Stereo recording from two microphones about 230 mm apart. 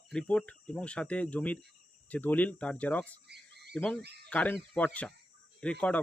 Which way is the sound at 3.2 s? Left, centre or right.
Right.